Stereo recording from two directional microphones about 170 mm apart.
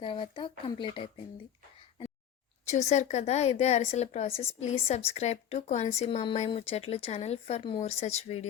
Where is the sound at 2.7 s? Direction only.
45° left (ahead or behind).